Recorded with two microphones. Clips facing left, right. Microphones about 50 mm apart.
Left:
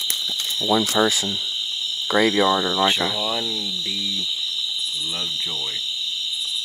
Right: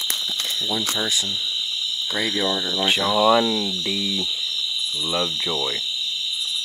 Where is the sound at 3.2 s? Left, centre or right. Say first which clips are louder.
Right 9 dB; right.